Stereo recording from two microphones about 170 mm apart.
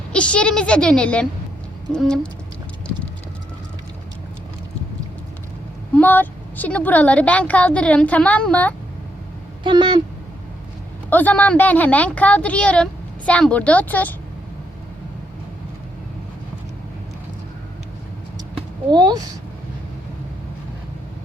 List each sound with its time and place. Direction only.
0.1 s a woman's voice: 5° left (ahead or behind)
1.9 s a sound: 5° left (ahead or behind)
5.9 s a woman's voice: 10° left (ahead or behind)
9.6 s speech: 25° right (ahead or behind)
11.1 s a woman's voice: 10° left (ahead or behind)
18.9 s speech: 25° right (ahead or behind)